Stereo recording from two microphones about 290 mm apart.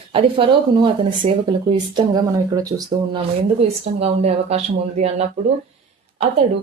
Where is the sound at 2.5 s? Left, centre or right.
Centre.